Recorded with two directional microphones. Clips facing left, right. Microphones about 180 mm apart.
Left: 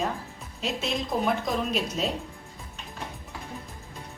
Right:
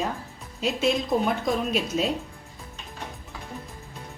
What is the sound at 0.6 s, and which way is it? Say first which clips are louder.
A woman's voice: right 6 dB; centre (ahead or behind).